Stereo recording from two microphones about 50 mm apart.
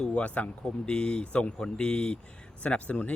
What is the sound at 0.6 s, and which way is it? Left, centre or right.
Speech, centre.